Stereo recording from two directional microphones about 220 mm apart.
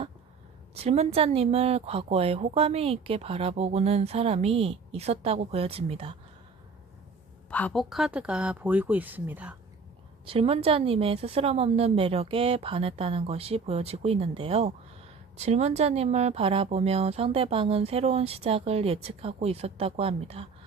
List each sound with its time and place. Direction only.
0.7 s a woman's voice: 30° right (ahead or behind)
7.5 s speech: 5° left (ahead or behind)
10.2 s a woman's voice: 25° right (ahead or behind)